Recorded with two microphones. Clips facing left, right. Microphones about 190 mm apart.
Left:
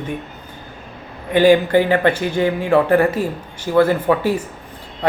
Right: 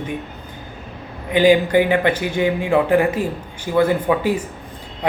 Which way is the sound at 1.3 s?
15° right (ahead or behind).